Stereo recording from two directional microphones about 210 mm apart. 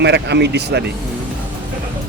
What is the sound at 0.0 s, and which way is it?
Speech, 55° right (ahead or behind).